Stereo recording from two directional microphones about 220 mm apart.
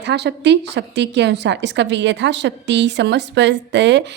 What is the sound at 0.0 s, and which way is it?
A woman's voice, 50° right (ahead or behind).